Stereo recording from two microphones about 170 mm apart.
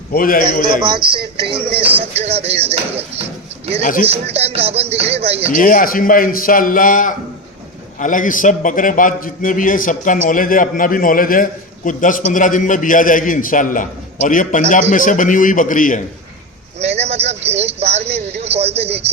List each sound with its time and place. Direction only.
0.1 s a man's voice: 55° left (ahead or behind)
0.8 s speech: 30° right (ahead or behind)
5.5 s a man's voice: 55° left (ahead or behind)
16.8 s speech: 40° right (ahead or behind)